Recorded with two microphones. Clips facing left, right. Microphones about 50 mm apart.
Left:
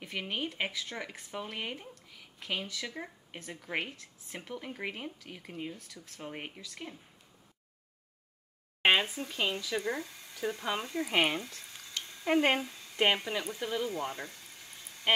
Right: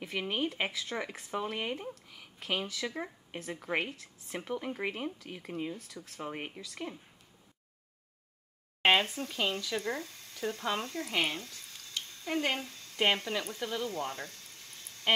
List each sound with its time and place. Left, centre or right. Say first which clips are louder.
0.0 s speech: right 3 dB; centre
8.8 s speech: even; centre
12.1 s a sound: left 6 dB; centre
12.5 s speech: left 3 dB; centre